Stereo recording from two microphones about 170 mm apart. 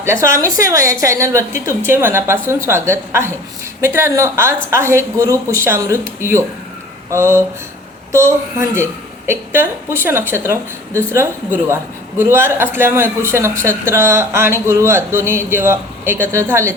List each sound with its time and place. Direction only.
0.0 s a woman's voice: 15° right (ahead or behind)